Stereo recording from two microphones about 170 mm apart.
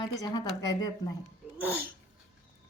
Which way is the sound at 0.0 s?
20° left (ahead or behind).